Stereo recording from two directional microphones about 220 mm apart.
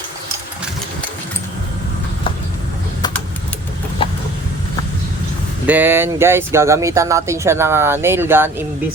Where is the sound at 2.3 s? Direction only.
25° left (ahead or behind).